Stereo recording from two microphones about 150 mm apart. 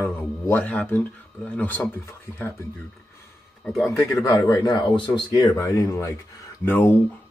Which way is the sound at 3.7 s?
Centre (ahead or behind).